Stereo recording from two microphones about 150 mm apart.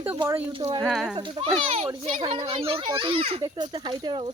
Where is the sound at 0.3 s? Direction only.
20° right (ahead or behind).